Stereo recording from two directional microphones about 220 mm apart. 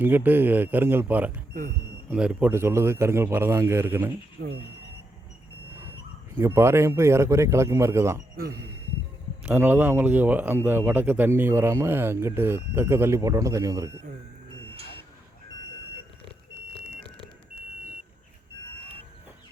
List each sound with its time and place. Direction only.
0.0 s speech: 10° right (ahead or behind)
4.4 s speech: 45° right (ahead or behind)
6.3 s speech: 10° right (ahead or behind)
9.4 s speech: 10° right (ahead or behind)